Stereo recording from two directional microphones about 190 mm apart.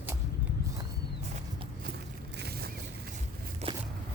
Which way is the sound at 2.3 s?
55° right (ahead or behind).